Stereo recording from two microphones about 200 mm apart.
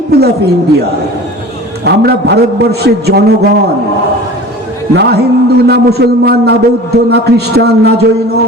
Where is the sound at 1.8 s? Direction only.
55° right (ahead or behind).